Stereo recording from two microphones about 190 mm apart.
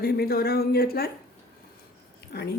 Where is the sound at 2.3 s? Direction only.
60° left (ahead or behind).